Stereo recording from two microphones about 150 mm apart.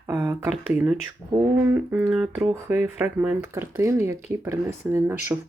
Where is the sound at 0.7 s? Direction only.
10° right (ahead or behind).